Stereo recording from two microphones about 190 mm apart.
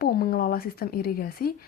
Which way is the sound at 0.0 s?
55° left (ahead or behind).